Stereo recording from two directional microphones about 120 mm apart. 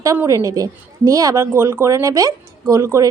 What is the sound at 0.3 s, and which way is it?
A woman's voice, 30° right (ahead or behind).